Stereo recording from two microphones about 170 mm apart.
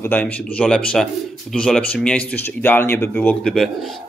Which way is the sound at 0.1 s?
5° left (ahead or behind).